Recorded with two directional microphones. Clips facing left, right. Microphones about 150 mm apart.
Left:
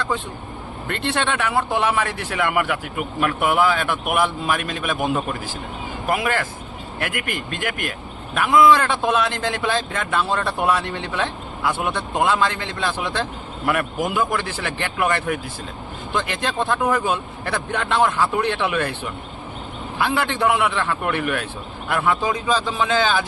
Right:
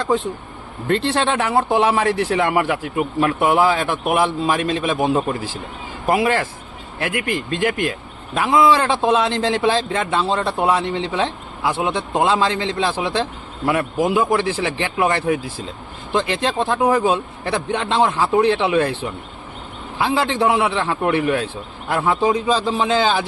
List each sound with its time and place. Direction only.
0.9 s a man's voice: 35° right (ahead or behind)
20.0 s a man's voice: 30° right (ahead or behind)